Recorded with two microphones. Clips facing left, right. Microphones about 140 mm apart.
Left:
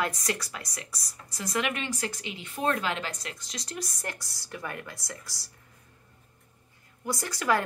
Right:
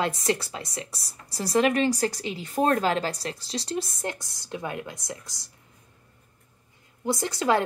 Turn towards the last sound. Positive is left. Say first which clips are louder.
# right 4 dB
turn(degrees=-25)  # may be behind; listen again after turning